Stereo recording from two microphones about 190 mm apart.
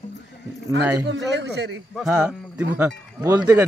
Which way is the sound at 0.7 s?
70° right (ahead or behind).